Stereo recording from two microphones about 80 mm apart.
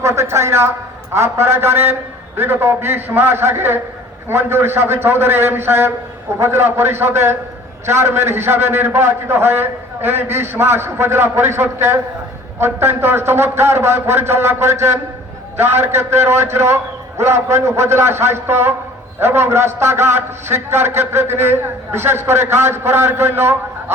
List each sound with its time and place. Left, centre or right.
0.0 s a man's voice: right